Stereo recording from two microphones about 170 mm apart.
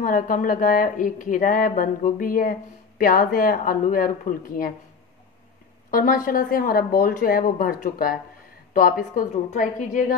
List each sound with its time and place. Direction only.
0.0 s speech: 50° left (ahead or behind)
5.9 s speech: 55° left (ahead or behind)